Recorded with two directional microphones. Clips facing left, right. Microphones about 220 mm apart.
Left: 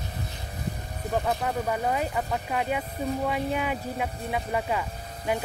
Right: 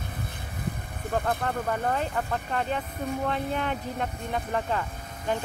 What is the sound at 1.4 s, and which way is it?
Speech, 10° left (ahead or behind).